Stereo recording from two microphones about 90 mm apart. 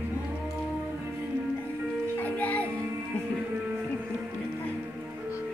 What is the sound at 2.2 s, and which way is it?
Music, 15° left (ahead or behind).